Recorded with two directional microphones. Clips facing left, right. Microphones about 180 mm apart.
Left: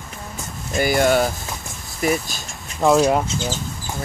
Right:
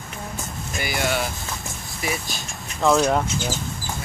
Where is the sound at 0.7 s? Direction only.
50° left (ahead or behind).